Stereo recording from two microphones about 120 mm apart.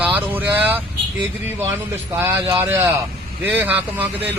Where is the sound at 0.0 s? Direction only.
15° right (ahead or behind).